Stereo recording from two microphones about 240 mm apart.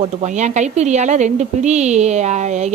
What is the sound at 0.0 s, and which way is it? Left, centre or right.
Speech, right.